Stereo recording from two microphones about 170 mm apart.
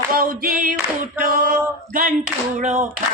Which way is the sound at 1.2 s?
55° right (ahead or behind).